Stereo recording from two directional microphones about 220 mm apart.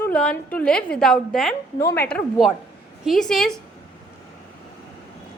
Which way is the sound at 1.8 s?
15° left (ahead or behind).